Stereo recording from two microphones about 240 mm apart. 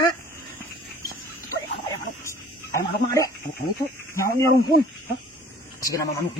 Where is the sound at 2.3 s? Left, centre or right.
Centre.